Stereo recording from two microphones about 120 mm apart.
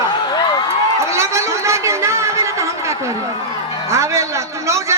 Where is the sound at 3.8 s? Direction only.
25° right (ahead or behind).